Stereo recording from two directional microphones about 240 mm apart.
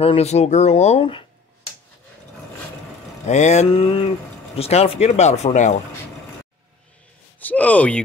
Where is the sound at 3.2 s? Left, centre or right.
Left.